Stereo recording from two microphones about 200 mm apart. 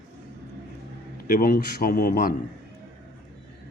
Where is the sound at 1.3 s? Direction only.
50° left (ahead or behind).